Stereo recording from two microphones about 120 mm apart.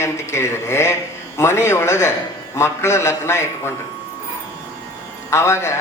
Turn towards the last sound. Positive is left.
turn(degrees=20)  # may be behind; listen again after turning